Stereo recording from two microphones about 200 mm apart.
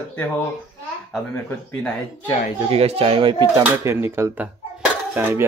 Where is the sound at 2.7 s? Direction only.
30° right (ahead or behind).